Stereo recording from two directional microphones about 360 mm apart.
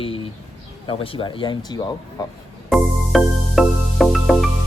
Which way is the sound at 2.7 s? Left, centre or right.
Centre.